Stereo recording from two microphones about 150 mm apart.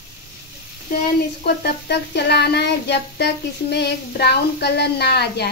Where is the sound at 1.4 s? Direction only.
90° left.